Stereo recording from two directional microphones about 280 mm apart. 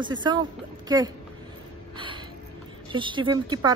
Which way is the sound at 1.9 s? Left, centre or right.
Centre.